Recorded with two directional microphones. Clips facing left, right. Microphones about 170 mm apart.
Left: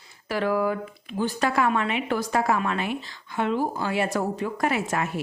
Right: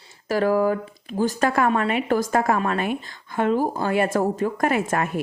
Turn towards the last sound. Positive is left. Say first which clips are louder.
# right 4 dB
turn(degrees=-50)  # may be behind; listen again after turning